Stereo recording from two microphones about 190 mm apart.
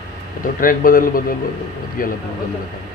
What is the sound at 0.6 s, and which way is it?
Speech, 50° left (ahead or behind).